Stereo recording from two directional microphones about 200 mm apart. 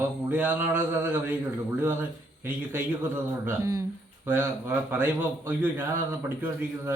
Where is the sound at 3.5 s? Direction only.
15° right (ahead or behind).